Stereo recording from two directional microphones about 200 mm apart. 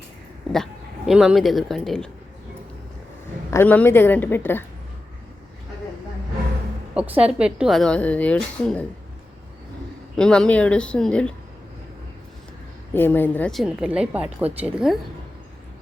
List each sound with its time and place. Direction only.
0.5 s speech: centre (ahead or behind)
3.5 s a woman's voice: 10° left (ahead or behind)
6.9 s a woman's voice: 5° right (ahead or behind)
10.2 s a woman's voice: 5° left (ahead or behind)
12.9 s a woman's voice: 10° left (ahead or behind); by 14.9 s 5° right (ahead or behind)